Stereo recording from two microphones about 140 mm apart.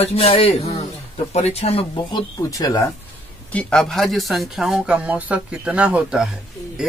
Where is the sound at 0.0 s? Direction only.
45° left (ahead or behind).